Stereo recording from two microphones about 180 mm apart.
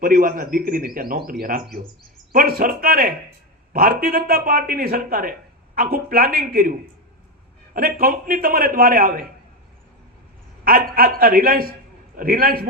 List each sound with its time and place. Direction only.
0.0 s a man's voice: 55° right (ahead or behind)
10.6 s a man's voice: 55° right (ahead or behind)